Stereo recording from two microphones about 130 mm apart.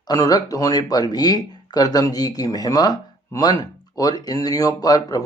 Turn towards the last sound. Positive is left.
turn(degrees=30)  # may be behind; listen again after turning